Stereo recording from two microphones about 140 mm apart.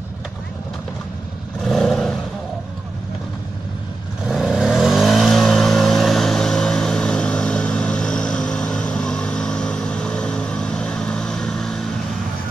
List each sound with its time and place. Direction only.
1.6 s vehicle: 5° left (ahead or behind)
4.3 s vehicle: centre (ahead or behind)